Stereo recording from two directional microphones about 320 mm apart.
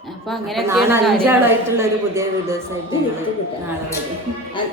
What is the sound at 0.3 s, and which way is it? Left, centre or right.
A woman's voice, centre.